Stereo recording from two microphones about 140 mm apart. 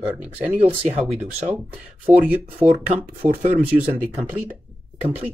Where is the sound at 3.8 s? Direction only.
15° right (ahead or behind).